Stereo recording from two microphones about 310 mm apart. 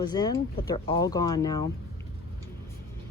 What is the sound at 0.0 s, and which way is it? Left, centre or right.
Speech, centre.